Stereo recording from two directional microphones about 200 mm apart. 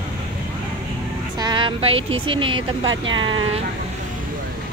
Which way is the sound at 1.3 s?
20° right (ahead or behind).